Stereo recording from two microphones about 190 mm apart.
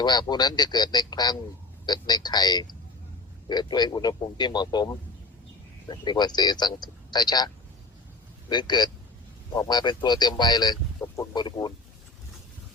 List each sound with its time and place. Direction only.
0.0 s speech: 25° left (ahead or behind)